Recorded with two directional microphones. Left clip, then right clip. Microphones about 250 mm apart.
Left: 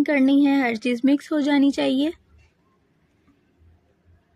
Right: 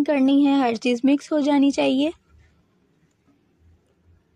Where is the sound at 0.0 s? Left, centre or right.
Centre.